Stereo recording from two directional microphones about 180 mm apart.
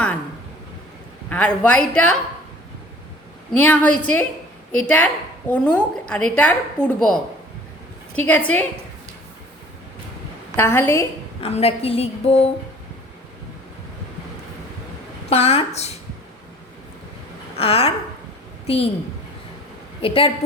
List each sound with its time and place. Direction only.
1.3 s a woman's voice: 5° left (ahead or behind)
3.5 s a woman's voice: 10° left (ahead or behind)
10.6 s a woman's voice: 15° left (ahead or behind)
11.3 s a woman's voice: 35° left (ahead or behind)
15.3 s a woman's voice: 35° left (ahead or behind)
17.6 s a woman's voice: 35° left (ahead or behind)
20.0 s a woman's voice: 30° left (ahead or behind)